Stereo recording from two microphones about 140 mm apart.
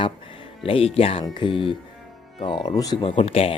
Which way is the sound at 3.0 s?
40° left (ahead or behind).